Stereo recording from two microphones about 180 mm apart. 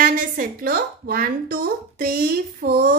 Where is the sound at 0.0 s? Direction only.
50° right (ahead or behind).